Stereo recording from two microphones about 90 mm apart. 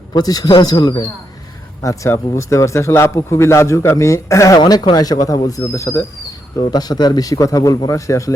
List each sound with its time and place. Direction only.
0.1 s a man's voice: 45° left (ahead or behind)
2.3 s a man's voice: 30° left (ahead or behind)
4.6 s a man's voice: 50° left (ahead or behind); by 6.1 s 35° left (ahead or behind)
6.6 s a man's voice: 50° left (ahead or behind)